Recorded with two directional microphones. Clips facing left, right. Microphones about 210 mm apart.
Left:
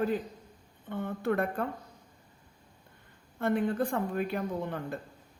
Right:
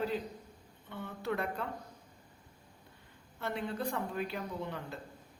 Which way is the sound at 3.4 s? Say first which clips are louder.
Left 8 dB; 50° left (ahead or behind).